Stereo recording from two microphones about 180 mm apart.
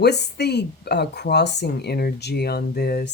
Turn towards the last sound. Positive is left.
turn(degrees=60)  # may be behind; listen again after turning